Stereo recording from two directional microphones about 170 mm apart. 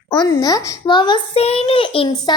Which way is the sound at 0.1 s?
25° left (ahead or behind).